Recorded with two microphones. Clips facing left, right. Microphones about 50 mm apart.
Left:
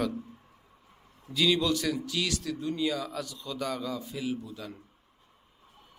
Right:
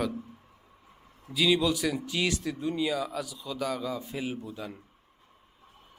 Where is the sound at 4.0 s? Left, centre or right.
Right.